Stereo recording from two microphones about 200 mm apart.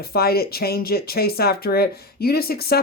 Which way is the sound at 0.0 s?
50° left (ahead or behind).